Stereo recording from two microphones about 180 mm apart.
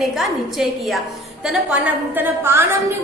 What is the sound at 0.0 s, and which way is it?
A woman's voice, centre (ahead or behind).